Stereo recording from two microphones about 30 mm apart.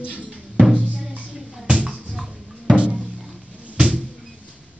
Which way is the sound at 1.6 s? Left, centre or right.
Right.